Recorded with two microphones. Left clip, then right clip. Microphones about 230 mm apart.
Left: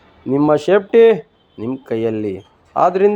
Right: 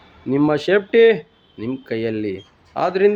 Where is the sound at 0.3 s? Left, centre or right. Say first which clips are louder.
Left 4 dB; centre.